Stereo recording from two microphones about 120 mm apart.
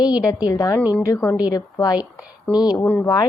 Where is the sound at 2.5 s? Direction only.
10° left (ahead or behind).